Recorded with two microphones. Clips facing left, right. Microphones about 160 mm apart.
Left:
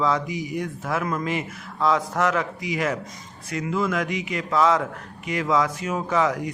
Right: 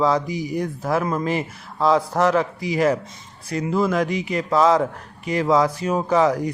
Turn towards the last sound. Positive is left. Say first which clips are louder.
# right 5 dB
turn(degrees=-35)  # may be behind; listen again after turning